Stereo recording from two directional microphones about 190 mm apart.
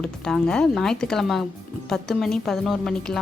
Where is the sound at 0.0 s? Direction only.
5° left (ahead or behind).